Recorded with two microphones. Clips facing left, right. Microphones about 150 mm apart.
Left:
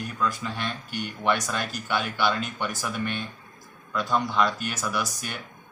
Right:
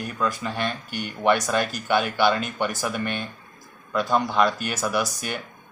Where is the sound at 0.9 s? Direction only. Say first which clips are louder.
Right 1 dB; 5° right (ahead or behind).